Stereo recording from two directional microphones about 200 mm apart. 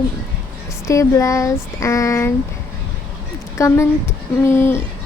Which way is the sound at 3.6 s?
15° left (ahead or behind).